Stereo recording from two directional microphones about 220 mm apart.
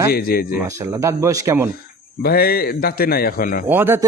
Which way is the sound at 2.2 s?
45° left (ahead or behind).